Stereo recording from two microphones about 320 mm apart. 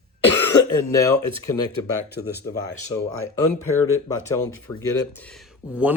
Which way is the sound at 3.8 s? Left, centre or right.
Left.